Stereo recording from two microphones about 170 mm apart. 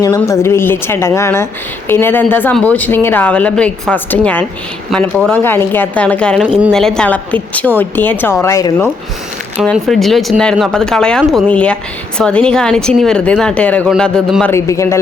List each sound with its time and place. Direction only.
0.2 s speech: 15° left (ahead or behind)
9.7 s speech: centre (ahead or behind)
14.5 s speech: 15° left (ahead or behind)